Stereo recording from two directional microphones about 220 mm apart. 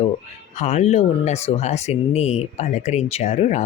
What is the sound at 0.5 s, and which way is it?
Speech, 30° left (ahead or behind).